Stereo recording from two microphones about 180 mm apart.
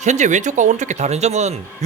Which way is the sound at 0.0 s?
40° right (ahead or behind).